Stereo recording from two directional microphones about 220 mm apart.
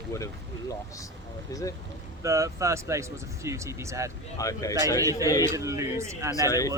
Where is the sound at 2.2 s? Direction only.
15° right (ahead or behind).